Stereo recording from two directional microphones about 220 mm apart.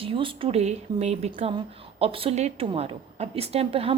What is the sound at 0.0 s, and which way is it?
Speech, 25° right (ahead or behind).